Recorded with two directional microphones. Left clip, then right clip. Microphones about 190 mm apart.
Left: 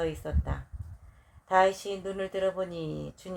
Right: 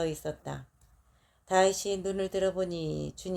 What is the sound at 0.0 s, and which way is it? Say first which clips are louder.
Speech: even; 45° right (ahead or behind).